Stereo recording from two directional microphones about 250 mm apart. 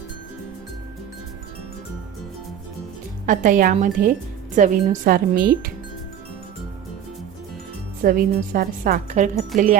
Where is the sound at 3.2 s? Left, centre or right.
Right.